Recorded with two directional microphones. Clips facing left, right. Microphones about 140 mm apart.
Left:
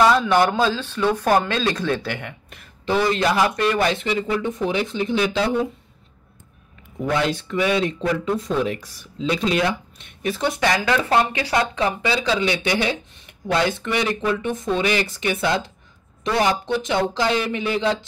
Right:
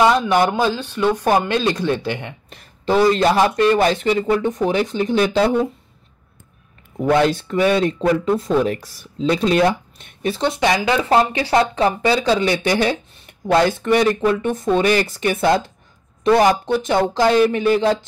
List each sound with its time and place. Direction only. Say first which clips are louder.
0.0 s speech: right 1 dB; 20° right (ahead or behind)
2.5 s speech: right 4 dB; 35° right (ahead or behind)
7.0 s speech: right 6 dB; 40° right (ahead or behind)
10.2 s speech: right 3 dB; 25° right (ahead or behind)
11.1 s speech: right 4 dB; 30° right (ahead or behind)